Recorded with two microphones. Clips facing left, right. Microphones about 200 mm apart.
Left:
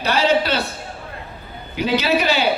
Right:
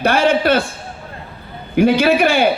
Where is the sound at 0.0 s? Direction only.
50° right (ahead or behind).